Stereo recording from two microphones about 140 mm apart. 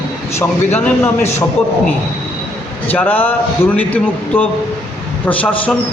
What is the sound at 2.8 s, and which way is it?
A man's voice, 10° left (ahead or behind).